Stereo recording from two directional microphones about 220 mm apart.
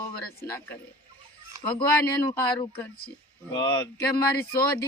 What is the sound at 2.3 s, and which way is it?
Speech, 10° left (ahead or behind).